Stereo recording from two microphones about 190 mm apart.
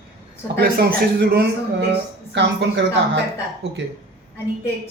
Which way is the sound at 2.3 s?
65° right (ahead or behind).